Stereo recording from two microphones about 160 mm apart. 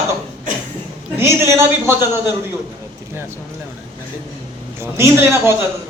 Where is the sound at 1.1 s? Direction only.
15° right (ahead or behind).